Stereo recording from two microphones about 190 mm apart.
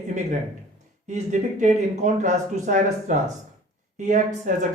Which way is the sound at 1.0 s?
40° right (ahead or behind).